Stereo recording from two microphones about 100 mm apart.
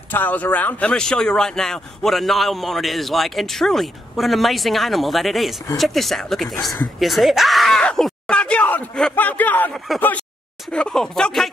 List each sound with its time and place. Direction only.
0.1 s speech: 15° left (ahead or behind)
10.7 s speech: 5° left (ahead or behind)